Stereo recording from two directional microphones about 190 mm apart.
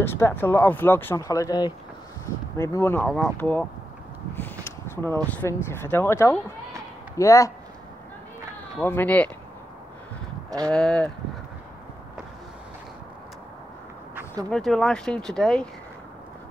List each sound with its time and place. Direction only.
0.0 s speech: 10° left (ahead or behind)
8.8 s speech: 10° left (ahead or behind)
10.7 s speech: 5° left (ahead or behind)
14.1 s a sound: 20° right (ahead or behind)
14.5 s speech: centre (ahead or behind)